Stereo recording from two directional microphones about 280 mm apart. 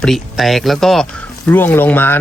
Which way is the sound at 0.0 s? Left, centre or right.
Centre.